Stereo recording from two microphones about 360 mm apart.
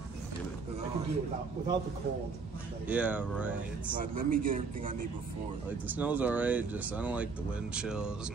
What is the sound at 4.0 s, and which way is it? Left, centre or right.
A man's voice, right.